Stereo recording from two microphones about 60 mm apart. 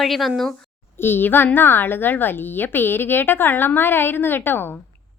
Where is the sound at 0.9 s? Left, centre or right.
Left.